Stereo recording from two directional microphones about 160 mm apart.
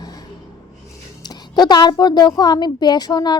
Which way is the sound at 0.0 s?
25° left (ahead or behind).